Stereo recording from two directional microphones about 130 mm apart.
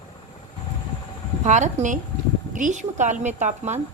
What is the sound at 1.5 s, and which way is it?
A woman's voice, 70° right (ahead or behind).